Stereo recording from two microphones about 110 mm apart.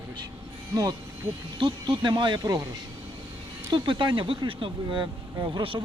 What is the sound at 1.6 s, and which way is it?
Speech, 45° right (ahead or behind).